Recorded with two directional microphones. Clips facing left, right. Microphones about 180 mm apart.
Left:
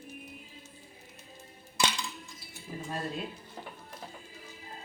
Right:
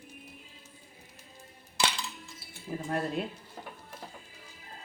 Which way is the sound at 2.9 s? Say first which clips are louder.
Right 5 dB; 60° right (ahead or behind).